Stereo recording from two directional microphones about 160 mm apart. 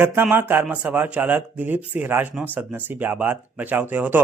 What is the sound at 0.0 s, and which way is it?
Speech, 15° right (ahead or behind).